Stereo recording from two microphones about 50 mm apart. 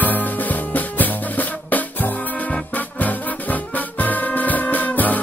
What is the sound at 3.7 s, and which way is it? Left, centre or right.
Music, left.